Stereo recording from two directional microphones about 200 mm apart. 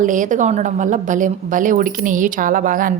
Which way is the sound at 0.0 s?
40° right (ahead or behind).